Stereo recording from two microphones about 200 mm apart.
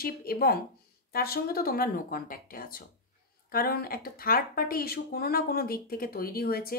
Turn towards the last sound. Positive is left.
turn(degrees=50)  # may be behind; listen again after turning